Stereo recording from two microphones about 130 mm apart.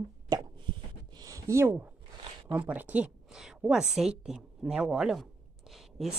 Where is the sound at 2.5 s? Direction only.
10° right (ahead or behind).